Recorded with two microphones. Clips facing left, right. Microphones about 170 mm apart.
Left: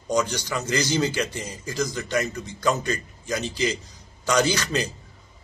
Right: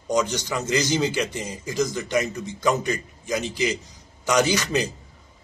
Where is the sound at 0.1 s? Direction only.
20° right (ahead or behind).